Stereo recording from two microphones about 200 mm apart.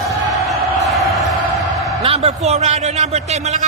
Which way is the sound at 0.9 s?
Centre (ahead or behind).